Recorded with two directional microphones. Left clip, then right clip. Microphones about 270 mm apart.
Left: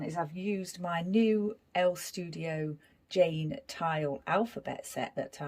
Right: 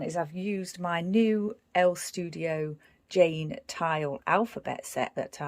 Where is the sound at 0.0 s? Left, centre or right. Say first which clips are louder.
Right 3 dB; right.